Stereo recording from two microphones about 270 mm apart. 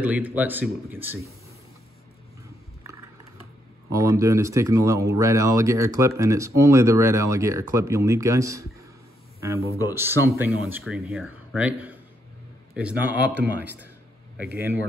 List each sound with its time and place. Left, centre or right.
0.0 s speech: centre
3.9 s speech: centre
9.6 s speech: centre
9.9 s speech: centre